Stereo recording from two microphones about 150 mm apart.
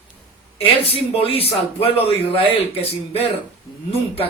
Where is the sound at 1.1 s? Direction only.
40° left (ahead or behind).